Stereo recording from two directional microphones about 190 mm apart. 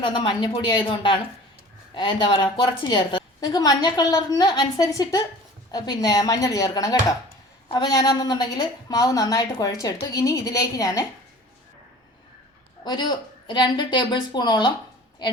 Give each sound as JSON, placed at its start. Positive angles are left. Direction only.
{"t": 0.0, "sound": "a woman's voice", "side_deg": 25}
{"t": 12.8, "sound": "a woman's voice", "side_deg": 20}